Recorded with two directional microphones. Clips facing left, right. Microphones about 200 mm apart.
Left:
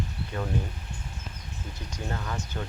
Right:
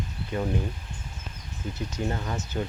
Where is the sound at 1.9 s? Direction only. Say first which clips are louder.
Right 3 dB; 25° right (ahead or behind).